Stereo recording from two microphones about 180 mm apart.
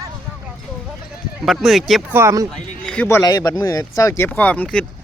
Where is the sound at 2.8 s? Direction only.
10° left (ahead or behind).